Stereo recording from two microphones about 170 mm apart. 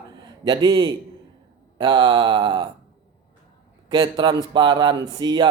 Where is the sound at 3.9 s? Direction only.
25° right (ahead or behind).